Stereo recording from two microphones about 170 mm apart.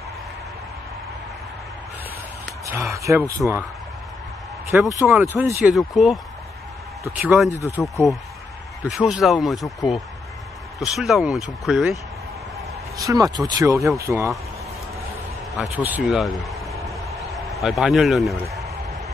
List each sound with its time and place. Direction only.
2.6 s speech: 15° right (ahead or behind)
5.0 s speech: 10° right (ahead or behind)
7.2 s speech: 10° right (ahead or behind)
7.4 s speech: 20° left (ahead or behind)
7.8 s speech: centre (ahead or behind)
10.8 s speech: centre (ahead or behind)
12.9 s speech: 20° right (ahead or behind)
15.5 s speech: 5° right (ahead or behind)
16.8 s a sound: centre (ahead or behind)